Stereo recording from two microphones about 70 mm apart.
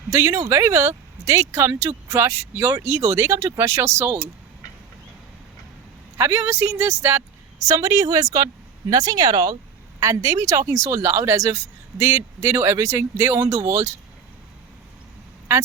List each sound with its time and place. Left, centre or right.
0.1 s speech: right
6.1 s speech: right
7.7 s speech: right
10.0 s speech: right